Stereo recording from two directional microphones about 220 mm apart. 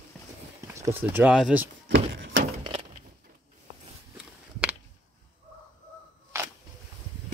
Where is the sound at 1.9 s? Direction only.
60° right (ahead or behind).